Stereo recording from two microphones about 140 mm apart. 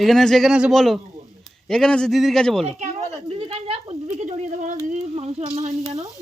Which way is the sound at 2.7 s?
50° right (ahead or behind).